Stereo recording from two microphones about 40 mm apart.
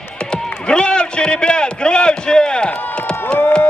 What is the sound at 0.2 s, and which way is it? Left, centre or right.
Run, left.